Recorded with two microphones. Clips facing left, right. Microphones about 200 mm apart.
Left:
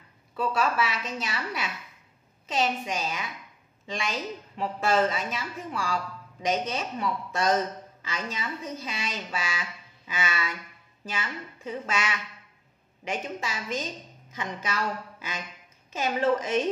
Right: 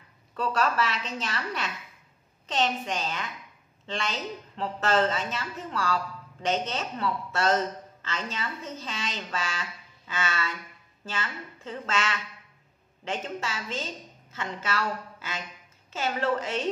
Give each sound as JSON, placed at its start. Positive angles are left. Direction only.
{"t": 0.3, "sound": "a woman's voice", "side_deg": 10}